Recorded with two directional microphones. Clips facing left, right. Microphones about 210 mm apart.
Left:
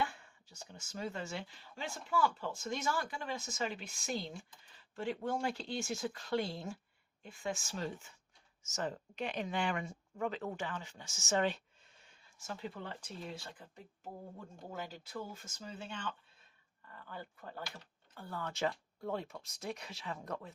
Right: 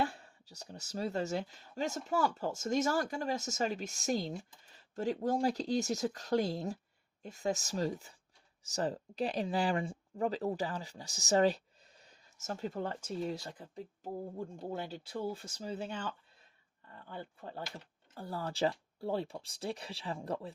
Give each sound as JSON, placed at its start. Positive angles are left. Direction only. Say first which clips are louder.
{"t": 0.0, "sound": "speech", "louder": "right 3 dB", "side_deg": -35}